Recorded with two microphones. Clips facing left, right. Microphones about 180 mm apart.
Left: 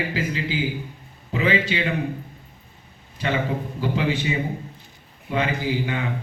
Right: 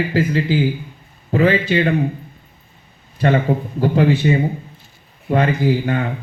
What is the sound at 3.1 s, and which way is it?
A man's voice, 50° right (ahead or behind).